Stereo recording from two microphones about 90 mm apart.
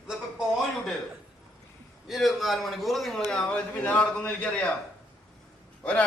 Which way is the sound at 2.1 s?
Centre (ahead or behind).